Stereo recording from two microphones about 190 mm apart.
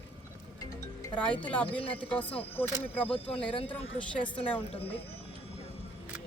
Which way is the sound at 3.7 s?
5° left (ahead or behind).